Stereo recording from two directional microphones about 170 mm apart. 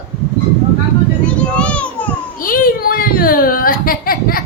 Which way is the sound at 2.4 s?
55° left (ahead or behind).